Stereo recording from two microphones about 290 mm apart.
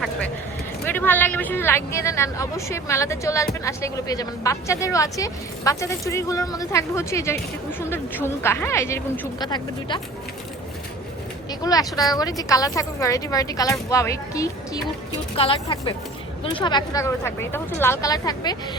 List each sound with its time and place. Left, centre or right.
0.9 s speech: centre
11.6 s speech: centre